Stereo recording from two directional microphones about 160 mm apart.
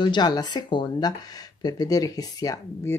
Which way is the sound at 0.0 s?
25° left (ahead or behind).